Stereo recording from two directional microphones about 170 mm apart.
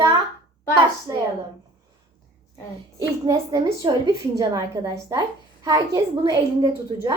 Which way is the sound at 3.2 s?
25° right (ahead or behind).